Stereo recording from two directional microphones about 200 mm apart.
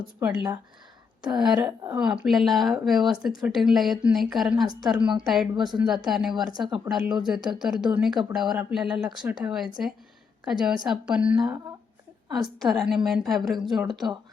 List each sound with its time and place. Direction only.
0.2 s speech: 5° right (ahead or behind)
11.3 s speech: 20° right (ahead or behind)
12.5 s speech: centre (ahead or behind)